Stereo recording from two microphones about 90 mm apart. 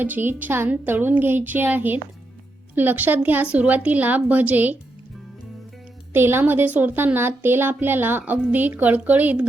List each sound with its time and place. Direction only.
0.0 s a woman's voice: 20° right (ahead or behind)
6.1 s a woman's voice: 25° right (ahead or behind)